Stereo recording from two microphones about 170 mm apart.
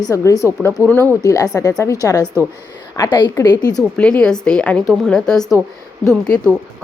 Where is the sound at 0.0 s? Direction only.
20° left (ahead or behind).